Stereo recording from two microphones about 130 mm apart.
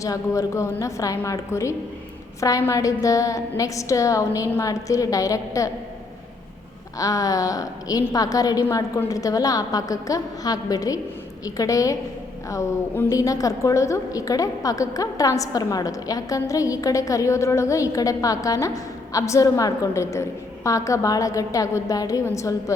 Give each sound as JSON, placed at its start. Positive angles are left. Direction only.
{"t": 0.0, "sound": "a woman's voice", "side_deg": 25}
{"t": 7.0, "sound": "a woman's voice", "side_deg": 25}